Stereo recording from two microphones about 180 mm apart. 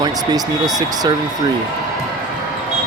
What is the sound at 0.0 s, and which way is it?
Speech, 20° right (ahead or behind).